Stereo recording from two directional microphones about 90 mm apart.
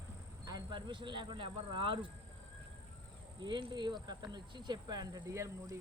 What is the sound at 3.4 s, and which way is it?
Speech, 60° right (ahead or behind).